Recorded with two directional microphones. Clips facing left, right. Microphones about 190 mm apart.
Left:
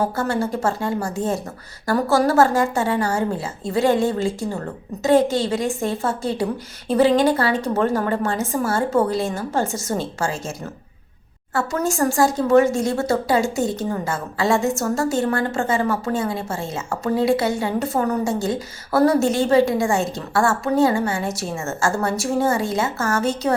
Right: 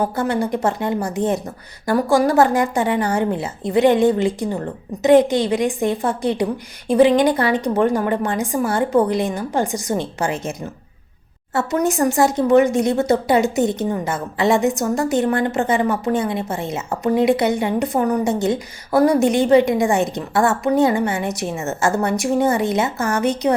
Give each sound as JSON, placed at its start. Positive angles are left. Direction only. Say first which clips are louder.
{"t": 0.0, "sound": "a woman's voice", "louder": "right 2 dB", "side_deg": -15}
{"t": 11.5, "sound": "speech", "louder": "right 3 dB", "side_deg": -20}